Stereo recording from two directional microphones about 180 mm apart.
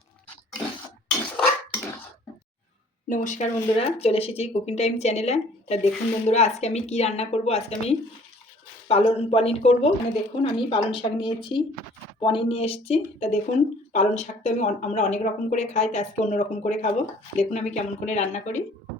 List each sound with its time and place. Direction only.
3.1 s speech: 45° left (ahead or behind)